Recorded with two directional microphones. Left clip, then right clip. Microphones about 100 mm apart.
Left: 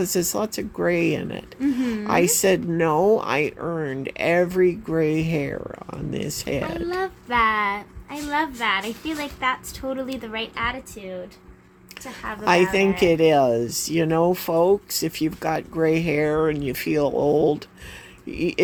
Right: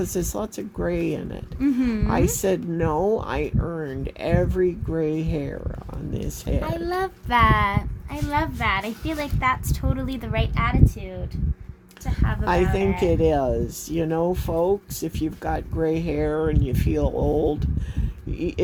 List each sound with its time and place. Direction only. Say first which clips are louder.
0.0 s speech: left 4 dB; 45° left (ahead or behind)
6.6 s a woman's voice: right 2 dB; 70° right (ahead or behind)
8.1 s a woman's voice: left 1 dB; 50° right (ahead or behind)
12.2 s speech: even; 35° right (ahead or behind)
12.7 s speech: left 3 dB; 40° left (ahead or behind)